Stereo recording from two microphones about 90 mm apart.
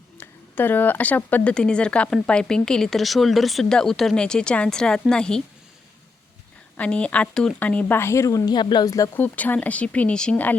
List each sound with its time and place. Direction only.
0.2 s speech: 20° left (ahead or behind)
6.7 s speech: 15° left (ahead or behind)
7.9 s a woman's voice: 30° left (ahead or behind)
8.5 s speech: 50° left (ahead or behind)
9.1 s speech: 20° left (ahead or behind)